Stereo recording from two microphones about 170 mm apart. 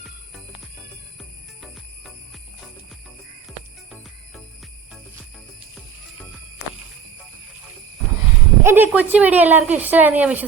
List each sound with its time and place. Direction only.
1.2 s music: centre (ahead or behind)
8.6 s speech: 10° right (ahead or behind)